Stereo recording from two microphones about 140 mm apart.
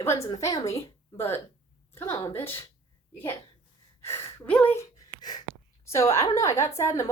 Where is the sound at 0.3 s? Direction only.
25° left (ahead or behind).